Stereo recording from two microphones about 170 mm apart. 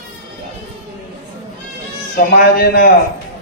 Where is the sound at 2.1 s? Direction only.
60° left (ahead or behind).